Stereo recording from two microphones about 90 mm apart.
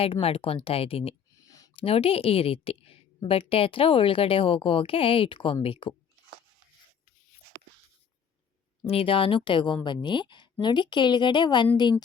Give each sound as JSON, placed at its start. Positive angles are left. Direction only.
{"t": 0.0, "sound": "a woman's voice", "side_deg": 90}
{"t": 1.4, "sound": "a sound", "side_deg": 40}
{"t": 1.7, "sound": "a woman's voice", "side_deg": 90}
{"t": 8.8, "sound": "a woman's voice", "side_deg": 85}